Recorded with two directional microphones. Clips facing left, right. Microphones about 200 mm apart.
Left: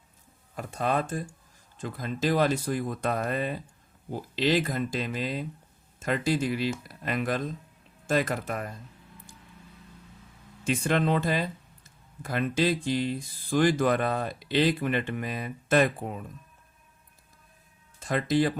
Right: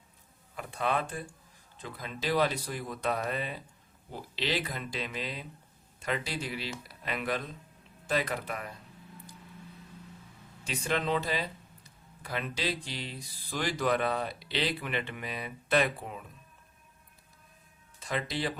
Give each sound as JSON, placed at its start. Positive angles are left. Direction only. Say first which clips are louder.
{"t": 0.5, "sound": "speech", "louder": "left 3 dB", "side_deg": 40}
{"t": 10.6, "sound": "speech", "louder": "left 6 dB", "side_deg": 50}
{"t": 18.0, "sound": "speech", "louder": "left 8 dB", "side_deg": 50}